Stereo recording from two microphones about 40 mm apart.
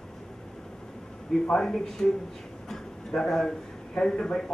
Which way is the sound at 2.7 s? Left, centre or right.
Centre.